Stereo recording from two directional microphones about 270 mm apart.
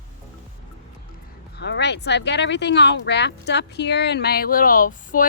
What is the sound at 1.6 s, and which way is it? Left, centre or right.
Speech, left.